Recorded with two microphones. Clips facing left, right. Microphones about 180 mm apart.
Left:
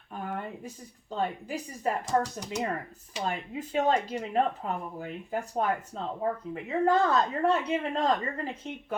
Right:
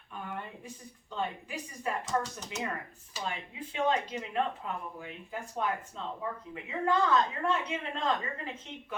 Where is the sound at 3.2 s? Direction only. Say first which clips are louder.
Left 6 dB; 45° left (ahead or behind).